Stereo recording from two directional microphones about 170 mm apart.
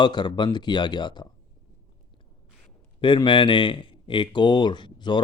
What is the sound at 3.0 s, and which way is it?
Speech, 30° left (ahead or behind).